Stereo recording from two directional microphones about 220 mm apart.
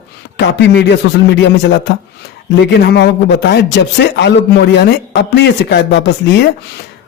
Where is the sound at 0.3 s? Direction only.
50° left (ahead or behind).